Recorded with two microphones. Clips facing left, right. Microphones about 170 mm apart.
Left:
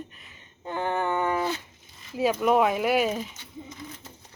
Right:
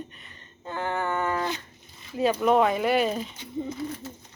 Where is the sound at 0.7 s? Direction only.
15° left (ahead or behind).